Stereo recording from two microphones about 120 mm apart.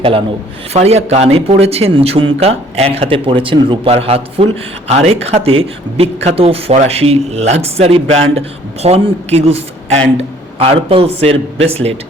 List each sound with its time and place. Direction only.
0.7 s a man's voice: 60° right (ahead or behind)